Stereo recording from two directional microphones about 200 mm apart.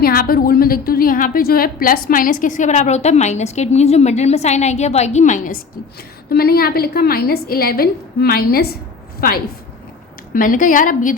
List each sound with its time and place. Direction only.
0.0 s a woman's voice: 50° left (ahead or behind)
6.3 s a woman's voice: 50° left (ahead or behind)